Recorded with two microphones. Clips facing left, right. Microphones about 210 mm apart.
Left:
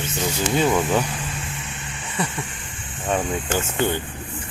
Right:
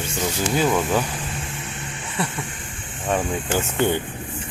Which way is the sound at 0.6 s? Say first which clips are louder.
Left 1 dB; centre (ahead or behind).